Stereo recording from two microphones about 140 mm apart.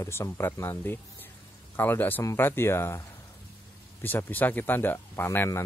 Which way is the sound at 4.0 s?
15° left (ahead or behind).